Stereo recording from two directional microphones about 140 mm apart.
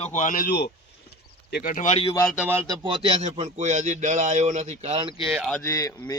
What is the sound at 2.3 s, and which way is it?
Speech, 15° right (ahead or behind).